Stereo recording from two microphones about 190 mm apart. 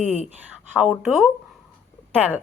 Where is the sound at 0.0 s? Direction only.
35° left (ahead or behind).